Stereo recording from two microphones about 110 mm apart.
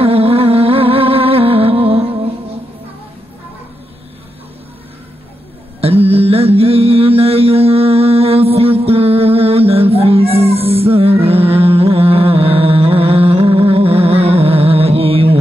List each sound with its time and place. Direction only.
0.0 s music: 60° right (ahead or behind)
5.8 s mantra: 60° right (ahead or behind)